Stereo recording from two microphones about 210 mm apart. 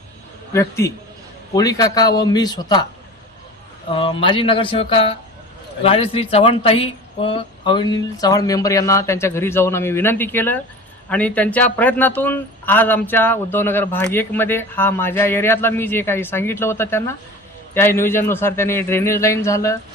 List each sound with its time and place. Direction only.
0.5 s speech: 15° left (ahead or behind)
3.9 s speech: 25° left (ahead or behind)